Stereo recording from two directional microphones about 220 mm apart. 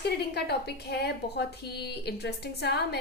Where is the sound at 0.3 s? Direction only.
50° left (ahead or behind).